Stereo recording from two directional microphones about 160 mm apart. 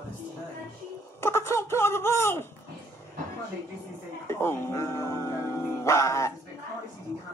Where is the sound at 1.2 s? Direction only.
15° left (ahead or behind).